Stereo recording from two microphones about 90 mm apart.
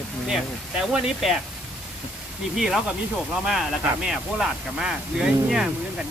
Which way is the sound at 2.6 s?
5° right (ahead or behind).